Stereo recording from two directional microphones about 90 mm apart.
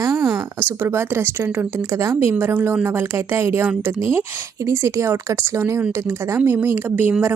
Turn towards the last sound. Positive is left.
turn(degrees=-20)  # may be behind; listen again after turning